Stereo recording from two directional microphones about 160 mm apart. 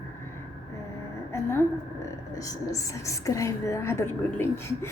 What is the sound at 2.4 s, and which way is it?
A woman's voice, 20° left (ahead or behind).